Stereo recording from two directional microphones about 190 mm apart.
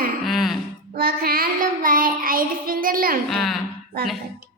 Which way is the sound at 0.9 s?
50° right (ahead or behind).